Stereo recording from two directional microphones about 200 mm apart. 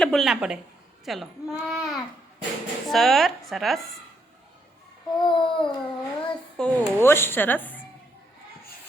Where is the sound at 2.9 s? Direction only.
Centre (ahead or behind).